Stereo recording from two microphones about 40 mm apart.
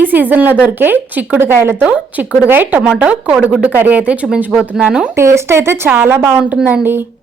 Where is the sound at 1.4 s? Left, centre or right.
Right.